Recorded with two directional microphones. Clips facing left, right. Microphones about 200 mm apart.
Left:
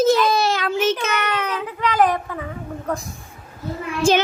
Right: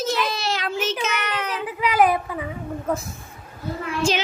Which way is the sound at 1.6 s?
10° right (ahead or behind).